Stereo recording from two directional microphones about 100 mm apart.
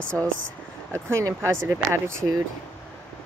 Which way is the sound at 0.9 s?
30° right (ahead or behind).